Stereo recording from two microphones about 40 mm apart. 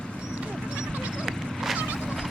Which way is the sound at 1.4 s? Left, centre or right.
Centre.